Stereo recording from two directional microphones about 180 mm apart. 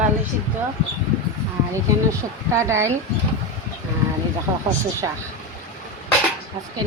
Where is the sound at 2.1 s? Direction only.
15° right (ahead or behind).